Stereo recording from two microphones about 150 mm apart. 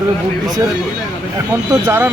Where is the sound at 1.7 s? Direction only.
20° right (ahead or behind).